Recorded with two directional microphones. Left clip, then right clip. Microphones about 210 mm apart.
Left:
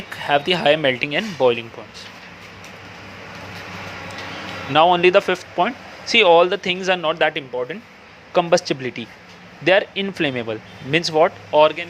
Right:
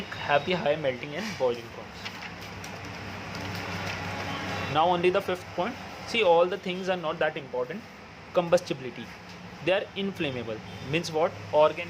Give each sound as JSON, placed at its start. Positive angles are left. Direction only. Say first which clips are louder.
{"t": 0.3, "sound": "speech", "louder": "left 9 dB", "side_deg": 35}
{"t": 4.7, "sound": "speech", "louder": "left 11 dB", "side_deg": 25}
{"t": 8.3, "sound": "speech", "louder": "left 7 dB", "side_deg": 20}